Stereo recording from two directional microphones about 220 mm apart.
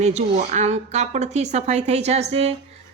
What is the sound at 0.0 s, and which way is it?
Speech, 30° right (ahead or behind).